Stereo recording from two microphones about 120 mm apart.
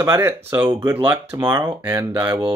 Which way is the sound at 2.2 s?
40° right (ahead or behind).